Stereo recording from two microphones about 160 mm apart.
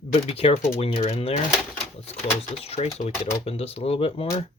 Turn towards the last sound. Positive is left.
turn(degrees=40)  # may be behind; listen again after turning